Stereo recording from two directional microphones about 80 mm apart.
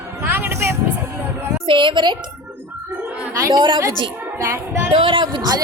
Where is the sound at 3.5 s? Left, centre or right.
Right.